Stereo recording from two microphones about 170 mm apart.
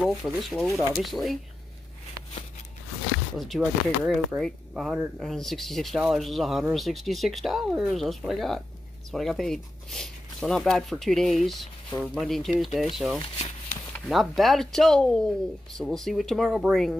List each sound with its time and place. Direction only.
0.0 s speech: centre (ahead or behind)
3.3 s speech: centre (ahead or behind)